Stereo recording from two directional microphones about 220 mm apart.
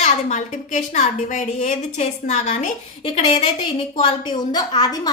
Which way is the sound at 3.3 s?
20° left (ahead or behind).